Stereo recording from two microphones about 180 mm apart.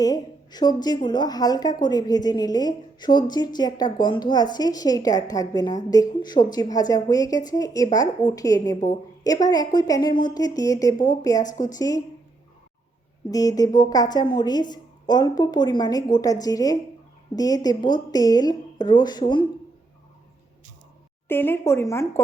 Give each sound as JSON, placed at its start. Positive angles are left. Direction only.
{"t": 0.0, "sound": "a woman's voice", "side_deg": 20}
{"t": 13.3, "sound": "a woman's voice", "side_deg": 20}
{"t": 21.2, "sound": "speech", "side_deg": 10}